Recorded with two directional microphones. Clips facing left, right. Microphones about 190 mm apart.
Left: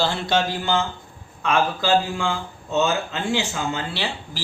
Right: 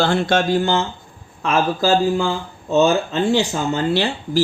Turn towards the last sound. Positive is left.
turn(degrees=-45)  # may be behind; listen again after turning